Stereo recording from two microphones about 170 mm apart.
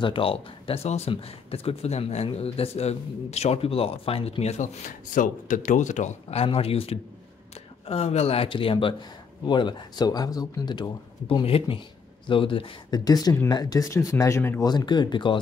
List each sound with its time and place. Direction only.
0.0 s speech: 30° left (ahead or behind); by 14.7 s 15° left (ahead or behind)
14.7 s speech: 25° left (ahead or behind)